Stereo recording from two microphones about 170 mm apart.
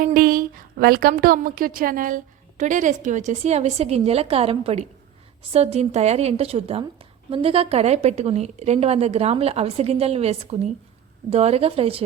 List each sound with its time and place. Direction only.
0.0 s a woman's voice: 55° right (ahead or behind); by 12.0 s 35° right (ahead or behind)